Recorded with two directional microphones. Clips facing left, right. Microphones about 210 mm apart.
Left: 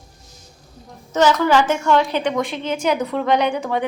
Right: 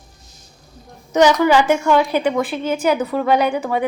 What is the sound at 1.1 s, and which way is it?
A woman's voice, 15° right (ahead or behind).